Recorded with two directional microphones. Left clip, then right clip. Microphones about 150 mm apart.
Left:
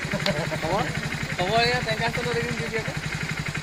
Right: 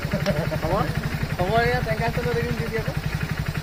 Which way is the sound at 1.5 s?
35° right (ahead or behind).